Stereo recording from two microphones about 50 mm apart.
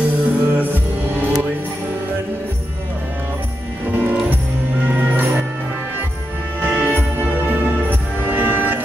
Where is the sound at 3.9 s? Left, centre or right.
Right.